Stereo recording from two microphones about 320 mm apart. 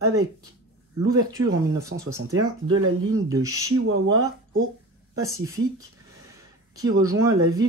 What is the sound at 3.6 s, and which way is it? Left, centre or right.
Speech, right.